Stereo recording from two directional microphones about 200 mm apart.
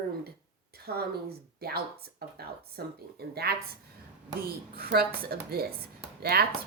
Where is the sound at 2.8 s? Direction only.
50° right (ahead or behind).